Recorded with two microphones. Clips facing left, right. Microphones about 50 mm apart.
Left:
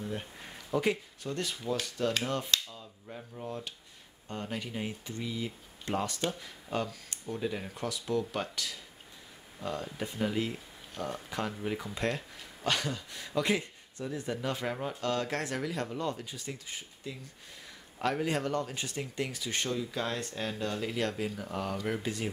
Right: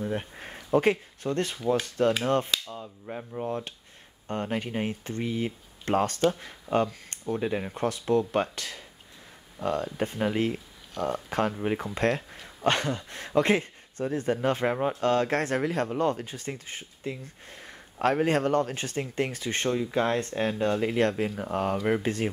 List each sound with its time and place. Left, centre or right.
0.0 s speech: right